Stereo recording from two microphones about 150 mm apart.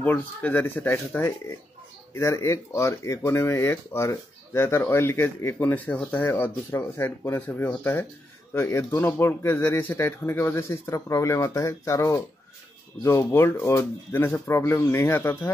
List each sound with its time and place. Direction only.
0.0 s speech: 10° left (ahead or behind)